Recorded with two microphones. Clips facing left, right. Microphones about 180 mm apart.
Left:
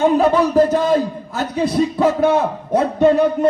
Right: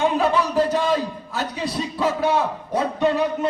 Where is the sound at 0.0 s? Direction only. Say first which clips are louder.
Left 6 dB; 40° left (ahead or behind).